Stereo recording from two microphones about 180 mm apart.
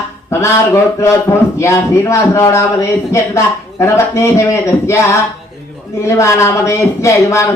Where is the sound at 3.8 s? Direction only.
15° left (ahead or behind).